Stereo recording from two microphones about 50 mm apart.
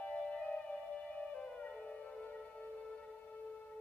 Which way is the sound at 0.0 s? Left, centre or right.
Left.